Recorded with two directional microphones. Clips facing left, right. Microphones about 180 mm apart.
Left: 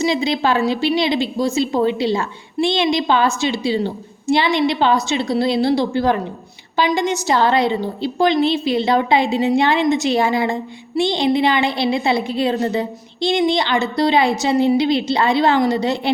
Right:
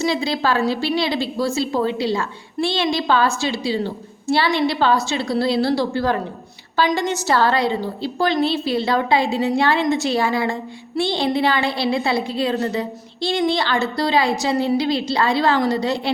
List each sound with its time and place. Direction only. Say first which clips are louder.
0.0 s a woman's voice: left 2 dB; 20° left (ahead or behind)